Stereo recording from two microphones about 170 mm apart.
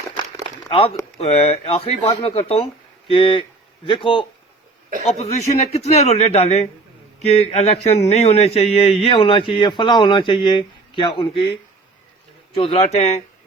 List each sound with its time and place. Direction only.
0.7 s speech: 35° left (ahead or behind)
5.0 s speech: 40° left (ahead or behind)
12.5 s speech: 35° left (ahead or behind)